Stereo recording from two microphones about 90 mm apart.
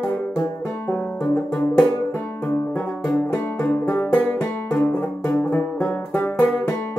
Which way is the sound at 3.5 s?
20° left (ahead or behind).